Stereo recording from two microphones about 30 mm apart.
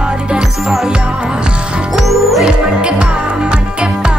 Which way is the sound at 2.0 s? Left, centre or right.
Centre.